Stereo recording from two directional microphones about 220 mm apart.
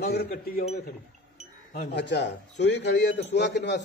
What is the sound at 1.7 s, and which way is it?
A man's voice, 50° left (ahead or behind).